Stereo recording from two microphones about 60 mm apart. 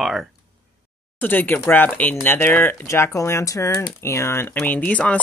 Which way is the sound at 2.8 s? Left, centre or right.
Left.